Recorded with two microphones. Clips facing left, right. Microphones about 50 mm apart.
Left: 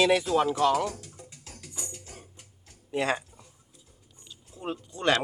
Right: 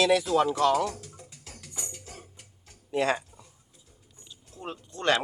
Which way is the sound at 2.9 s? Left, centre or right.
Centre.